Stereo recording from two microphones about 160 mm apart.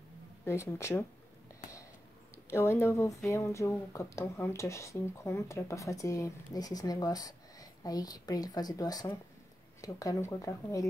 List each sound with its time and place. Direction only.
0.5 s speech: 15° left (ahead or behind)
2.5 s speech: 15° left (ahead or behind)